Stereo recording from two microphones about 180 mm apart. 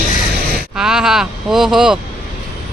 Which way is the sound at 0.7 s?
5° right (ahead or behind).